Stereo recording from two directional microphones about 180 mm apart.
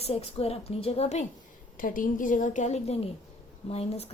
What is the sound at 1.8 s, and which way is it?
A woman's voice, 50° left (ahead or behind).